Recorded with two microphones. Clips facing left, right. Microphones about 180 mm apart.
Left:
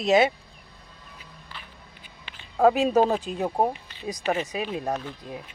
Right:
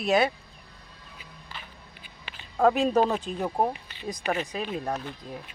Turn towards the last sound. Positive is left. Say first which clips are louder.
# left 2 dB
turn(degrees=15)  # may be behind; listen again after turning